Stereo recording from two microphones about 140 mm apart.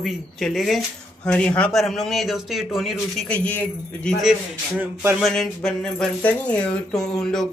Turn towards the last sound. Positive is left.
turn(degrees=0)  # may be behind; listen again after turning